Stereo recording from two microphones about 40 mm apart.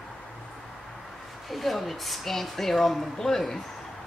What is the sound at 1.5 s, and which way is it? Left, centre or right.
Speech, centre.